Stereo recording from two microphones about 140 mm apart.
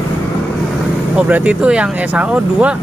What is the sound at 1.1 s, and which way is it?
Speech, 10° right (ahead or behind).